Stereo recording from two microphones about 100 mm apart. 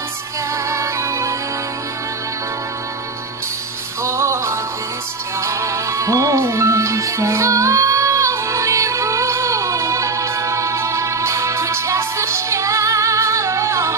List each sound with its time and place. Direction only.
0.7 s music: 30° right (ahead or behind)
4.0 s music: 30° right (ahead or behind)